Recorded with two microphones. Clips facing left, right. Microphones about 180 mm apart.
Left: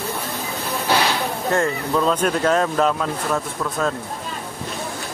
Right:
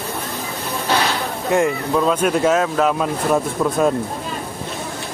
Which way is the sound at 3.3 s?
15° right (ahead or behind).